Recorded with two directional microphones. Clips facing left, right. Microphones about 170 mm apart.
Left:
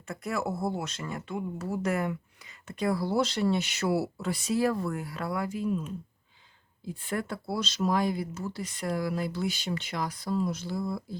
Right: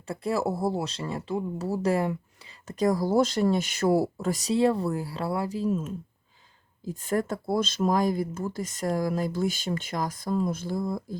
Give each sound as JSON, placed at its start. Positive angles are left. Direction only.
{"t": 0.1, "sound": "speech", "side_deg": -30}
{"t": 4.5, "sound": "speech", "side_deg": -30}
{"t": 6.8, "sound": "speech", "side_deg": -40}